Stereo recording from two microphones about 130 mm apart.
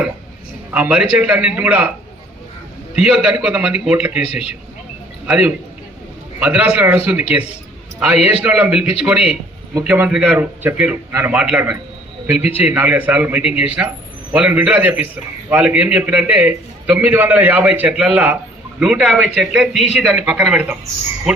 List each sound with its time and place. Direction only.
0.7 s a man's voice: 10° right (ahead or behind)
2.9 s a man's voice: 5° right (ahead or behind)
4.1 s a man's voice: 55° left (ahead or behind)
5.2 s a man's voice: 10° right (ahead or behind)